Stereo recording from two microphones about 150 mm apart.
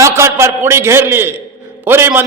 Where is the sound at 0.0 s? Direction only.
20° right (ahead or behind).